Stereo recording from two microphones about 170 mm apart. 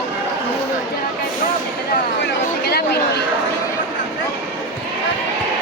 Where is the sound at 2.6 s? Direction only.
70° left (ahead or behind).